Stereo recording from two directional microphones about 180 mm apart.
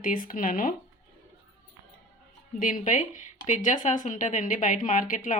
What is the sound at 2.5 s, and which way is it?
A woman's voice, 50° left (ahead or behind).